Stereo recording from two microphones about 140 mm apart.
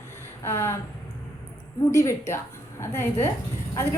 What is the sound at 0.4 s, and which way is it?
Speech, 20° left (ahead or behind).